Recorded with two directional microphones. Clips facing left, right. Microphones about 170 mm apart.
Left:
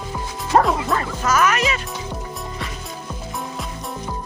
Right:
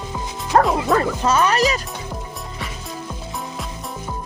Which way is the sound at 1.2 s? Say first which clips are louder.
Left 1 dB; 30° right (ahead or behind).